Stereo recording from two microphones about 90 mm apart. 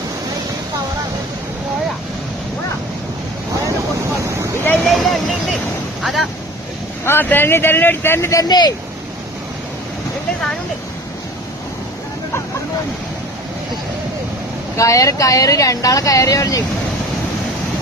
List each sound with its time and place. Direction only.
3.6 s wind noise: 35° right (ahead or behind)
4.5 s boat: 20° left (ahead or behind)
4.9 s vehicle: centre (ahead or behind)
6.0 s speech: centre (ahead or behind)
7.0 s speech: 25° left (ahead or behind)
8.4 s speech: 50° left (ahead or behind)
14.8 s speech: 35° left (ahead or behind)